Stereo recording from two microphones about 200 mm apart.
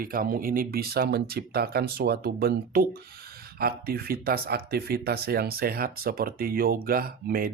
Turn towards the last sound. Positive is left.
turn(degrees=-45)  # may be behind; listen again after turning